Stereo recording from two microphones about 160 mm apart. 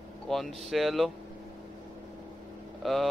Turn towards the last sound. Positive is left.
turn(degrees=0)  # may be behind; listen again after turning